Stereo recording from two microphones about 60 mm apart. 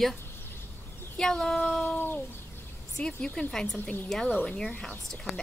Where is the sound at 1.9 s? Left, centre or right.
Left.